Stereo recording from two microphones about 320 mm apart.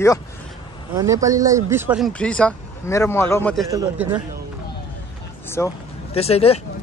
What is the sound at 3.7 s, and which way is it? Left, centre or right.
Speech, centre.